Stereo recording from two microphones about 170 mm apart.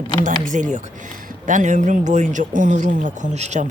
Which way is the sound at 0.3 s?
50° right (ahead or behind).